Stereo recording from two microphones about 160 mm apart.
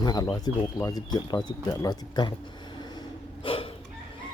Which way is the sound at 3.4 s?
35° left (ahead or behind).